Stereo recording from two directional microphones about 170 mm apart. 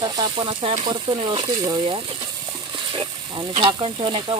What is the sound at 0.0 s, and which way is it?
Stir, 25° right (ahead or behind).